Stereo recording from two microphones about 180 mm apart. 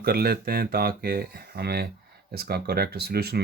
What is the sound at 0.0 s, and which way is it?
Speech, 60° right (ahead or behind).